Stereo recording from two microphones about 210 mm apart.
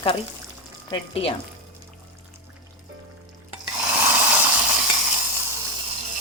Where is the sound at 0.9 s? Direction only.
25° left (ahead or behind).